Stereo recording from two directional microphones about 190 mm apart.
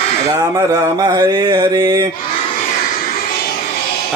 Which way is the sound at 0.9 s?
20° right (ahead or behind).